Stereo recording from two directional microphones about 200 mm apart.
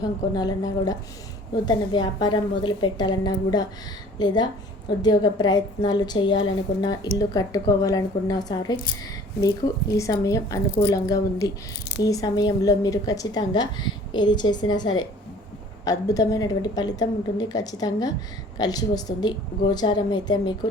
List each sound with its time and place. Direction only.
0.0 s a woman's voice: 20° left (ahead or behind)
9.9 s a woman's voice: 15° left (ahead or behind)